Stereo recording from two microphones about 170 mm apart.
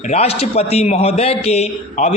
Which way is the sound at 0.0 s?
40° left (ahead or behind).